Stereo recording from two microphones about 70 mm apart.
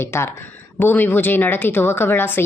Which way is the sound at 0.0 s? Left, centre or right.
Left.